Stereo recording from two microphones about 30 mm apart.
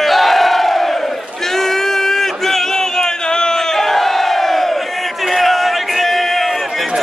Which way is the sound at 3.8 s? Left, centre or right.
Centre.